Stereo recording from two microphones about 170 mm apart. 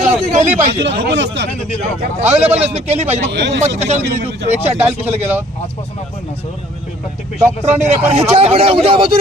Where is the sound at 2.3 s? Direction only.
40° right (ahead or behind).